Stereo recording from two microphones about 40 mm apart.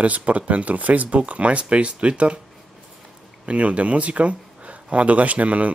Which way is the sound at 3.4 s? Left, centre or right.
Right.